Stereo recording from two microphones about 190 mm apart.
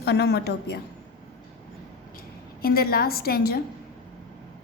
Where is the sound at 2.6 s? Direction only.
50° left (ahead or behind).